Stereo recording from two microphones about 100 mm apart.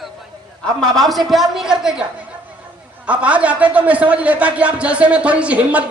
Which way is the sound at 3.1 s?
15° right (ahead or behind).